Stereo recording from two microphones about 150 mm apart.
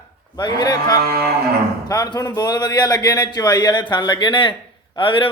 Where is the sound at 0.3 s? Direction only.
25° left (ahead or behind).